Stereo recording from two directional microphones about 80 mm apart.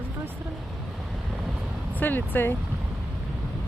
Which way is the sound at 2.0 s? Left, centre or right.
Left.